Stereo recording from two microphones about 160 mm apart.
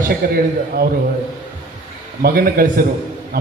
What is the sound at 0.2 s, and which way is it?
Speech, 70° right (ahead or behind).